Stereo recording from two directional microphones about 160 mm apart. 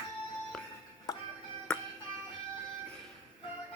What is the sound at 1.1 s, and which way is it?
Music, 20° left (ahead or behind).